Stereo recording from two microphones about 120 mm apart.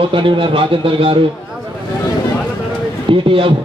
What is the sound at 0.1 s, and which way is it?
Speech, 45° right (ahead or behind).